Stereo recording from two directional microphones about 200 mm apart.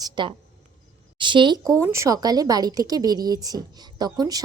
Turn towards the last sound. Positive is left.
turn(degrees=-20)  # may be behind; listen again after turning